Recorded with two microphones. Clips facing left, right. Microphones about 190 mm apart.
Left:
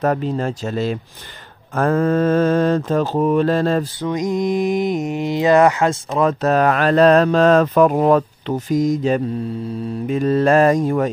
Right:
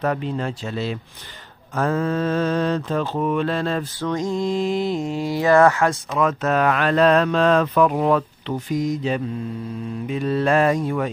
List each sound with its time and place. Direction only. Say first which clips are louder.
0.0 s mantra: left 4 dB; 40° left (ahead or behind)
4.0 s mantra: left 3 dB; 15° left (ahead or behind)
6.1 s speech: left 5 dB; 35° left (ahead or behind)
10.0 s mantra: left 5 dB; 45° left (ahead or behind)